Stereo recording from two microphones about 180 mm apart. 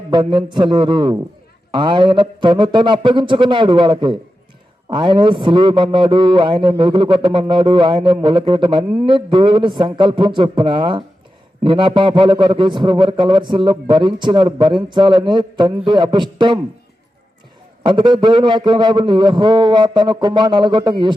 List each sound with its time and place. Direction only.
0.1 s a man's voice: 25° right (ahead or behind)
17.8 s a man's voice: 25° right (ahead or behind)